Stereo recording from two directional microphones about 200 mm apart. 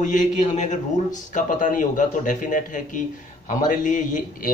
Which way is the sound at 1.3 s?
40° left (ahead or behind).